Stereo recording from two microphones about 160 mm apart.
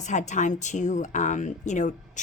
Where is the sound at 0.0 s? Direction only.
50° left (ahead or behind).